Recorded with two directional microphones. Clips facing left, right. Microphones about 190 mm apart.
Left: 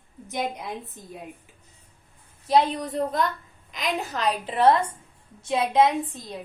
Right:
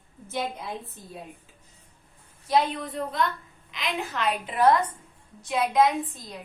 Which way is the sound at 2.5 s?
35° left (ahead or behind).